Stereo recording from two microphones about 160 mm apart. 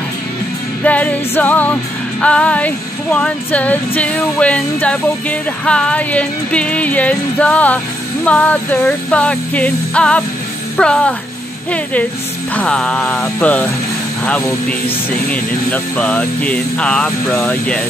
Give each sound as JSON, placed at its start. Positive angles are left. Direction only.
{"t": 0.8, "sound": "female singing", "side_deg": 10}
{"t": 10.8, "sound": "speech", "side_deg": 5}
{"t": 11.7, "sound": "female singing", "side_deg": 10}